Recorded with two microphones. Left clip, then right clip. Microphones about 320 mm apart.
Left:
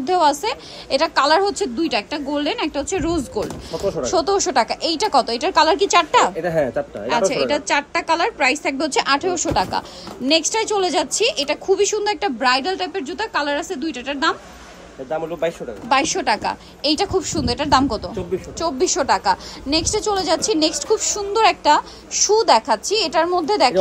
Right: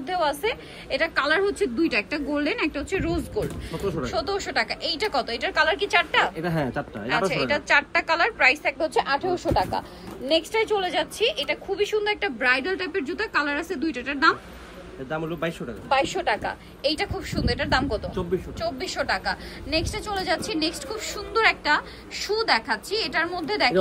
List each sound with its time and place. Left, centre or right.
0.0 s a woman's voice: centre
6.4 s speech: centre
7.1 s a woman's voice: centre
9.0 s speech: left
10.5 s a woman's voice: centre
15.0 s a man's voice: right
15.9 s a woman's voice: left
16.4 s a woman's voice: centre